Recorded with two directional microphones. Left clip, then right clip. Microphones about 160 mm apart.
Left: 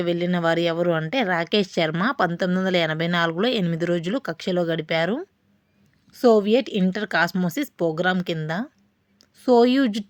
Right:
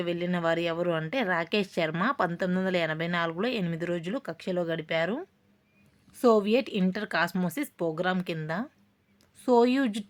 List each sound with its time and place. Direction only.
0.0 s speech: 30° left (ahead or behind)